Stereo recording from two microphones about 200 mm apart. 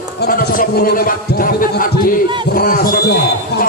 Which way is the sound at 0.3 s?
45° left (ahead or behind).